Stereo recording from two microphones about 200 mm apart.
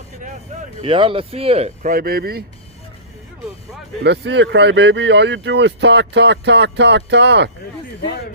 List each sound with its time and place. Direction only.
0.8 s speech: 25° right (ahead or behind); by 2.4 s 50° right (ahead or behind)
4.0 s speech: 60° right (ahead or behind)